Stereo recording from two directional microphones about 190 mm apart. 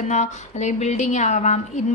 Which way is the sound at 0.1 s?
40° left (ahead or behind).